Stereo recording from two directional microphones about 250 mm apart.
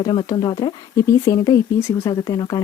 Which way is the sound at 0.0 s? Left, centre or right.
Centre.